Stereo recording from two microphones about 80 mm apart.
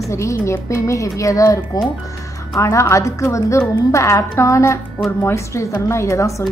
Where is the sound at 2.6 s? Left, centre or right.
Left.